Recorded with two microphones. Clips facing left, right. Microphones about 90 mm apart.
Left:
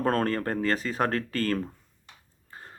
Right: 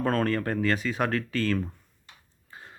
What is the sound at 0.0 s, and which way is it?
Speech, 40° left (ahead or behind).